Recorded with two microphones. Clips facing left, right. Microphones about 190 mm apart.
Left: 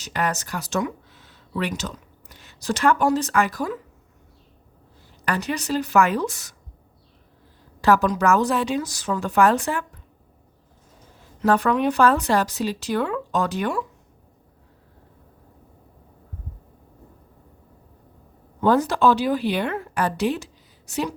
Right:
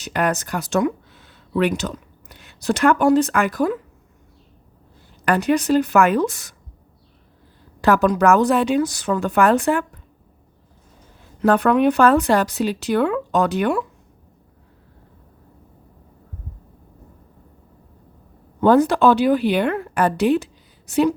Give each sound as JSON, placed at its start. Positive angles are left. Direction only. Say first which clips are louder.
{"t": 0.0, "sound": "speech", "louder": "right 4 dB", "side_deg": -55}
{"t": 5.2, "sound": "speech", "louder": "right 8 dB", "side_deg": -50}
{"t": 7.8, "sound": "speech", "louder": "right 3 dB", "side_deg": -55}
{"t": 11.4, "sound": "speech", "louder": "right 4 dB", "side_deg": -55}
{"t": 18.6, "sound": "speech", "louder": "right 4 dB", "side_deg": -60}